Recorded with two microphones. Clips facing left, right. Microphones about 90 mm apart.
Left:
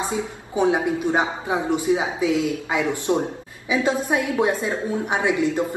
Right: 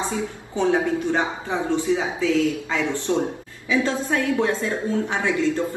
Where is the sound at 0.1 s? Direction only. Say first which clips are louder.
Left 1 dB; 15° left (ahead or behind).